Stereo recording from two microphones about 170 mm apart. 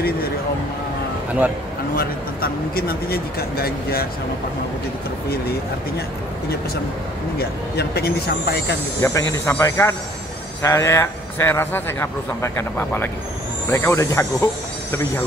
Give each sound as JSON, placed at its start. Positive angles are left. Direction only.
{"t": 2.0, "sound": "speech", "side_deg": 65}
{"t": 7.3, "sound": "speech", "side_deg": 70}
{"t": 9.0, "sound": "a man's voice", "side_deg": 20}